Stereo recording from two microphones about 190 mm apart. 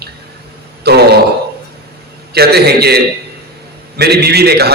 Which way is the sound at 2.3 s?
55° right (ahead or behind).